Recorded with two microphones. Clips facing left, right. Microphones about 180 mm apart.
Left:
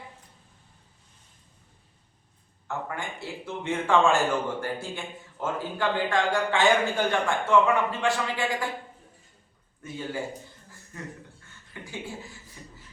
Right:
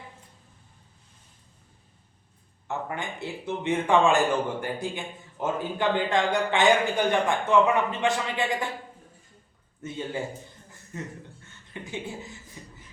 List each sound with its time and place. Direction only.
2.6 s a man's voice: 20° right (ahead or behind)
9.8 s a man's voice: 25° right (ahead or behind)